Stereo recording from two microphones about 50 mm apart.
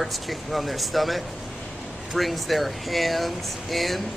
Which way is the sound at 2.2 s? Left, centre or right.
Centre.